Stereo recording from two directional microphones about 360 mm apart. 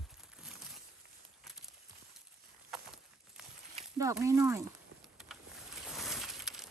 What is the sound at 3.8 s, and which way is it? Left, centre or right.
Speech, centre.